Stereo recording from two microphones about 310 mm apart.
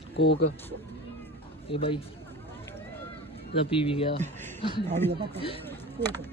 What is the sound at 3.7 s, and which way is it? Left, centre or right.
Speech, centre.